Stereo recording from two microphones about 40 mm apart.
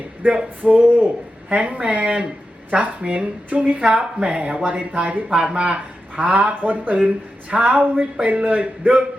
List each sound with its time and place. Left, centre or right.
0.2 s speech: right
1.5 s speech: right
3.8 s speech: right
5.4 s speech: right
7.5 s speech: right